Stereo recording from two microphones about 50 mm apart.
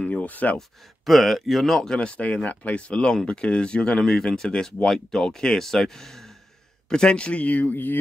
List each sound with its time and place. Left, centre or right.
0.0 s a sound: left
0.6 s speech: centre
6.9 s speech: centre; by 8.0 s left